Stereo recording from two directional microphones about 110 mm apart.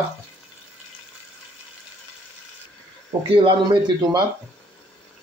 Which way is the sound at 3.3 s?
45° right (ahead or behind).